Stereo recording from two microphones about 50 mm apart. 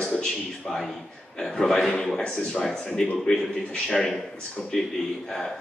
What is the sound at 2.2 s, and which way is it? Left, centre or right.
Speech, centre.